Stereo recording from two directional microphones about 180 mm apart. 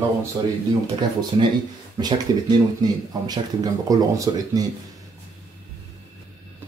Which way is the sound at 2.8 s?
25° right (ahead or behind).